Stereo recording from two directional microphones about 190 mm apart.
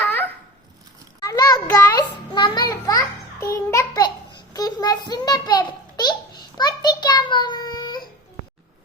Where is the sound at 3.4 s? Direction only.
15° left (ahead or behind).